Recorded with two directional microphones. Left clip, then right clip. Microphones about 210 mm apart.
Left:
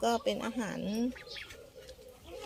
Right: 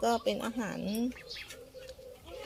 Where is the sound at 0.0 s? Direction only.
5° left (ahead or behind).